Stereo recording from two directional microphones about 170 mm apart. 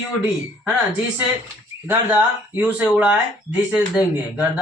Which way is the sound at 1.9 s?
10° right (ahead or behind).